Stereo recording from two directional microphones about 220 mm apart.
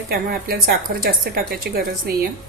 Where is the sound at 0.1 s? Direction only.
45° right (ahead or behind).